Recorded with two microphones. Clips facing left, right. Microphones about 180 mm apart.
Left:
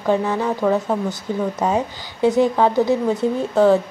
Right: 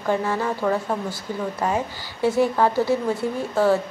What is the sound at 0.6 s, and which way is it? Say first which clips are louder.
Speech: left 5 dB; 10° left (ahead or behind).